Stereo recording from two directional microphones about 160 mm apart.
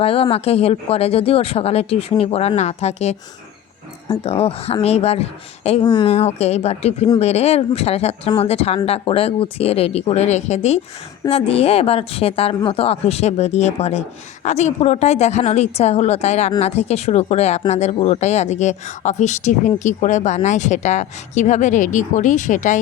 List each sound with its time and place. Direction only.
0.0 s speech: 35° left (ahead or behind)
4.2 s speech: 40° left (ahead or behind)
5.8 s speech: 30° left (ahead or behind)
6.1 s speech: 40° left (ahead or behind)